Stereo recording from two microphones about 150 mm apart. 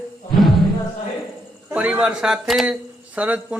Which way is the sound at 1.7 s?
10° right (ahead or behind).